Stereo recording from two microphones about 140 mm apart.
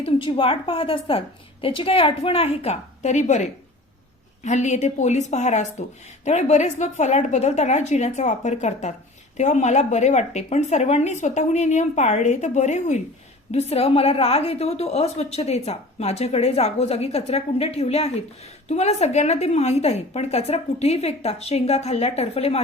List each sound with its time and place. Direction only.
0.0 s a woman's voice: 40° left (ahead or behind); by 3.4 s 55° left (ahead or behind)
4.4 s a woman's voice: 55° left (ahead or behind)